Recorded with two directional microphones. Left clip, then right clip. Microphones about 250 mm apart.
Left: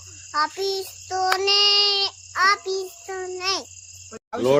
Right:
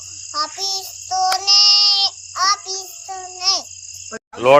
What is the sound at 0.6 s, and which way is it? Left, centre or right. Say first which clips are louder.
Speech: right 2 dB; centre.